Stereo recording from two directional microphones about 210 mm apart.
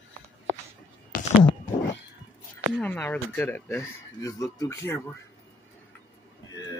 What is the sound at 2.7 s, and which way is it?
Speech, 10° left (ahead or behind).